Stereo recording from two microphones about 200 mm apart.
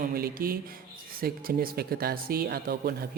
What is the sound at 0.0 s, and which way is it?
Speech, 50° right (ahead or behind).